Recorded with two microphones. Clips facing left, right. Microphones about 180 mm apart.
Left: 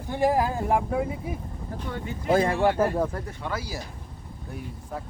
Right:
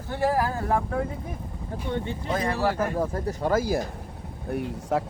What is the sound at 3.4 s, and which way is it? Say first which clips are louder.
Speech: right 12 dB; 45° right (ahead or behind).